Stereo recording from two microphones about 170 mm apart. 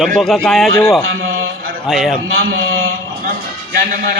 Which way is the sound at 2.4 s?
75° right (ahead or behind).